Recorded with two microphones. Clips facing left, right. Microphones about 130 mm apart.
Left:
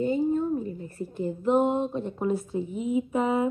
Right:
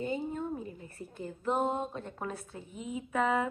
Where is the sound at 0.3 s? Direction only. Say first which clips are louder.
Left 10 dB; 40° left (ahead or behind).